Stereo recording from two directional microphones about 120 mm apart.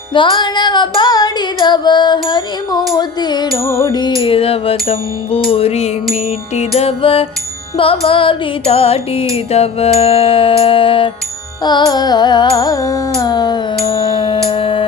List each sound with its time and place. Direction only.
0.1 s music: 40° left (ahead or behind)
4.2 s music: 50° left (ahead or behind)
11.6 s carnatic music: 35° left (ahead or behind)
13.8 s music: 45° left (ahead or behind)